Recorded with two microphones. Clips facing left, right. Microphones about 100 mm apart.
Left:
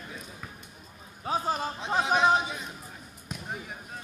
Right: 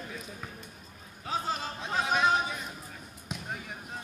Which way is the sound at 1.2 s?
35° left (ahead or behind).